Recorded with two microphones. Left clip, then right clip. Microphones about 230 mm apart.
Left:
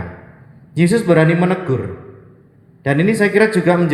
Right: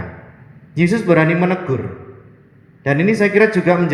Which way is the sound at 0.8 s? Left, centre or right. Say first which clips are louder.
Left 1 dB; left.